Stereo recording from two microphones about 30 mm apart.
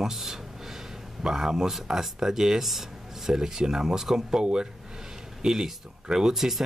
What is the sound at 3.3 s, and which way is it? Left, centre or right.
Speech, centre.